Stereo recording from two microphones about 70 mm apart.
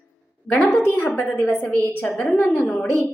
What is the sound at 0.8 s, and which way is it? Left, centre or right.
A woman's voice, left.